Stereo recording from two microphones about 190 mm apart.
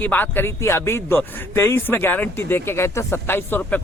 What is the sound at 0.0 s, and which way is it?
Speech, 10° left (ahead or behind).